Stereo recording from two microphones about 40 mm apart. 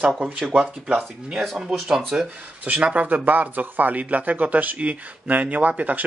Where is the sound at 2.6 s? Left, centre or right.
Right.